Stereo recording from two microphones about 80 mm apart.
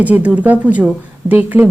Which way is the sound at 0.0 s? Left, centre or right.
Centre.